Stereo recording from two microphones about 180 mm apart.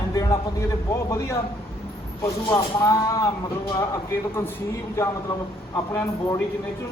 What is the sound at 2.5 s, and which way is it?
Speech, 20° left (ahead or behind).